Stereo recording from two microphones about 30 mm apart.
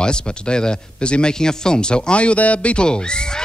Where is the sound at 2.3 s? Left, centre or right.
Left.